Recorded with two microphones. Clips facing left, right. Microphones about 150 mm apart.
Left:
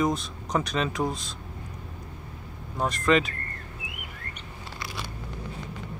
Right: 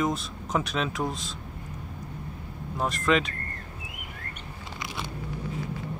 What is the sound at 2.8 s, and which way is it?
Speech, centre (ahead or behind).